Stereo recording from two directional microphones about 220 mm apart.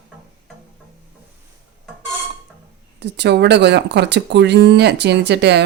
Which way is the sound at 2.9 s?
50° right (ahead or behind).